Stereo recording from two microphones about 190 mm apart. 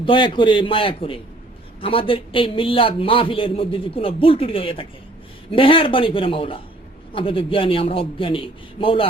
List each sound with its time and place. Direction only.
0.0 s a man's voice: 25° left (ahead or behind)